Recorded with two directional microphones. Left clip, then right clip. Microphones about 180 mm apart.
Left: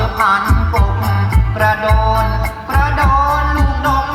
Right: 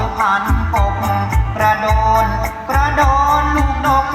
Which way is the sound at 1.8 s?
60° right (ahead or behind).